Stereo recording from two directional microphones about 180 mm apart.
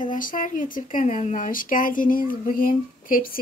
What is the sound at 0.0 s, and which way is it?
A woman's voice, 45° left (ahead or behind).